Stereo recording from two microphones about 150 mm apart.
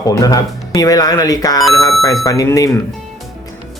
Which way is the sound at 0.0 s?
25° left (ahead or behind).